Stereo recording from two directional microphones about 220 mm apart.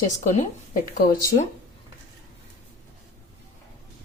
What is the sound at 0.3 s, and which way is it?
Speech, 35° left (ahead or behind).